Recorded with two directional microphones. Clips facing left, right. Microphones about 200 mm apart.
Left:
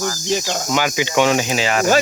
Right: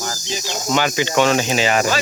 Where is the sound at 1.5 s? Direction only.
Centre (ahead or behind).